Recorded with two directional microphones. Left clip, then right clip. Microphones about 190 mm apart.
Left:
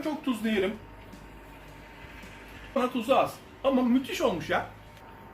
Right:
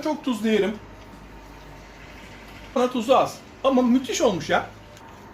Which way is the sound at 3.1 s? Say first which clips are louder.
Right 5 dB; 45° right (ahead or behind).